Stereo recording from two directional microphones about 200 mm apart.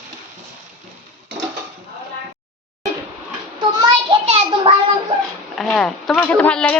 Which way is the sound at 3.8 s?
25° right (ahead or behind).